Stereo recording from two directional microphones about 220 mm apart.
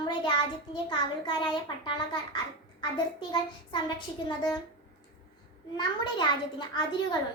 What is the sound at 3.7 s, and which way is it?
Speech, 20° left (ahead or behind).